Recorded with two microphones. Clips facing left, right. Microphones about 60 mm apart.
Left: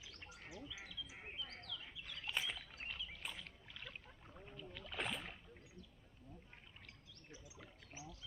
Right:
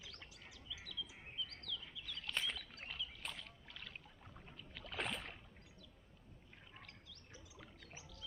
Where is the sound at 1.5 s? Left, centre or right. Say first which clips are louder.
Right 2 dB; left.